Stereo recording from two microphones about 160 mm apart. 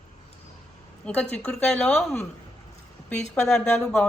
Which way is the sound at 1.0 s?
5° left (ahead or behind).